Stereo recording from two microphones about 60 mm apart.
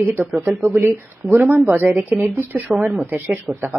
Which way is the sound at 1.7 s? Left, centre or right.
Right.